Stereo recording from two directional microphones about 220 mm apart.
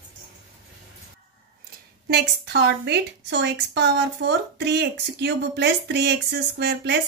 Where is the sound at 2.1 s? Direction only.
50° right (ahead or behind).